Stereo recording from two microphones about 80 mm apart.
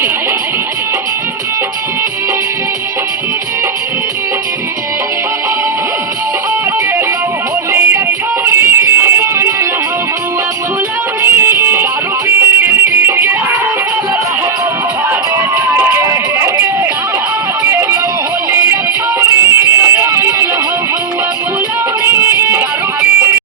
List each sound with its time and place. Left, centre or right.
7.7 s music: right
11.2 s music: right
15.5 s music: right
19.2 s music: right
22.0 s music: right